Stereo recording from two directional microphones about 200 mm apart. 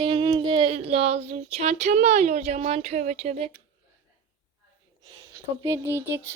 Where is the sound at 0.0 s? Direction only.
25° right (ahead or behind).